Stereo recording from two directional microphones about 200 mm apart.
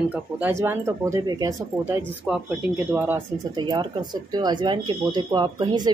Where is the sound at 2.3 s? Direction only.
5° right (ahead or behind).